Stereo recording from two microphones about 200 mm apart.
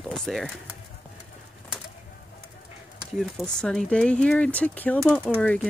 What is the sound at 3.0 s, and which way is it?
Speech, centre (ahead or behind).